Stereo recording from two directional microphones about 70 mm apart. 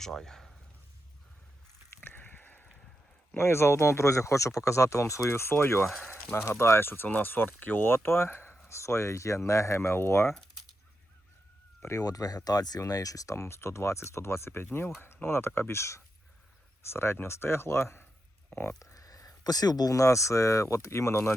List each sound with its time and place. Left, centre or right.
0.0 s speech: centre
2.0 s a sound: left
3.3 s speech: left
5.3 s speech: left
11.8 s speech: left
18.8 s speech: left